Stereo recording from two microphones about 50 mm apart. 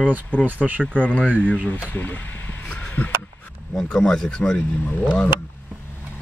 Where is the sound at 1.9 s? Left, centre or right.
Left.